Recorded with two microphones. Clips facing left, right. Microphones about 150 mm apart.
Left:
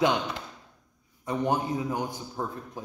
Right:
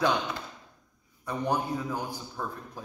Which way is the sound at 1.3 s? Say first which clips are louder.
Left 2 dB; 20° left (ahead or behind).